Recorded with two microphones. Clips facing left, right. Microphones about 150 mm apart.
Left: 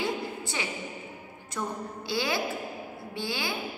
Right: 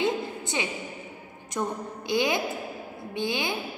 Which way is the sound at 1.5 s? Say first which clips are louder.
Right 3 dB; 20° right (ahead or behind).